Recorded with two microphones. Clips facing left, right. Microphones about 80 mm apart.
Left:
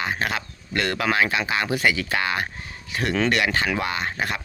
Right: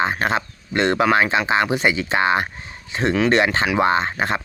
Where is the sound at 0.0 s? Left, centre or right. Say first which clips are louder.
Right 6 dB; right.